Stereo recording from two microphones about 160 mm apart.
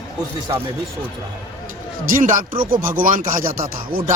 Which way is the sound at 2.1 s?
55° right (ahead or behind).